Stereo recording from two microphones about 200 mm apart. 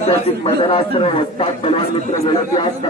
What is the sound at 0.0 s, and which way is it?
Speech, 30° left (ahead or behind).